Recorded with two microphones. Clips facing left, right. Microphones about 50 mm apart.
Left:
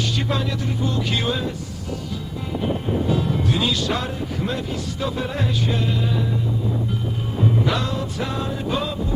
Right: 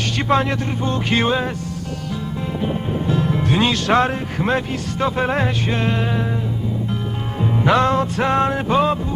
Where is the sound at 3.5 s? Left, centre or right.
Right.